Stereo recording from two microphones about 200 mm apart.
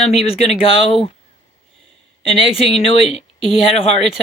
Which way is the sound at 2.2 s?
30° left (ahead or behind).